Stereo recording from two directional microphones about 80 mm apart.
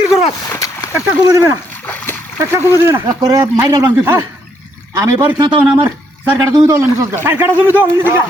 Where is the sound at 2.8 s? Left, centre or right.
Right.